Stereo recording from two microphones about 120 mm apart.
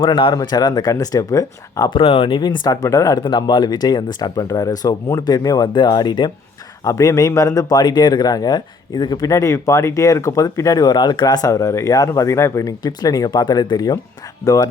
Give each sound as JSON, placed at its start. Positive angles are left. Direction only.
{"t": 0.0, "sound": "speech", "side_deg": 40}
{"t": 1.9, "sound": "speech", "side_deg": 45}
{"t": 3.2, "sound": "speech", "side_deg": 40}
{"t": 6.8, "sound": "speech", "side_deg": 25}